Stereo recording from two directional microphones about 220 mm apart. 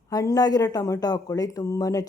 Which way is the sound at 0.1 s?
15° left (ahead or behind).